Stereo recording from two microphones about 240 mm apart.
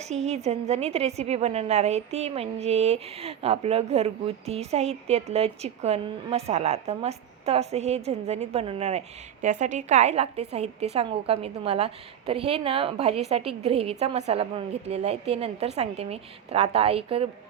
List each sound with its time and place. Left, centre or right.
0.1 s a woman's voice: right